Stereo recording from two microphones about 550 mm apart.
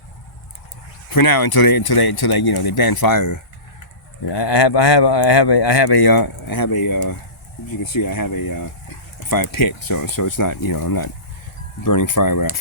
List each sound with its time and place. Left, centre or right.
1.1 s speech: left
4.3 s speech: left